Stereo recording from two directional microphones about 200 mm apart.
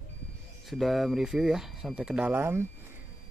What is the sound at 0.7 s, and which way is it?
Speech, centre (ahead or behind).